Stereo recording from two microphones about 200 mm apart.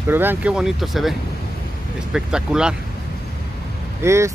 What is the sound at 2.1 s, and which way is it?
Speech, 5° right (ahead or behind).